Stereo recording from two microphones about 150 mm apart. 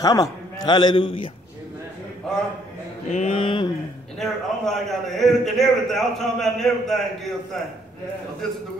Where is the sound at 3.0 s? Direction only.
50° left (ahead or behind).